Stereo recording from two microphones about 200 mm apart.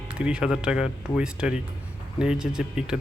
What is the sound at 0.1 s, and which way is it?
Speech, 5° right (ahead or behind).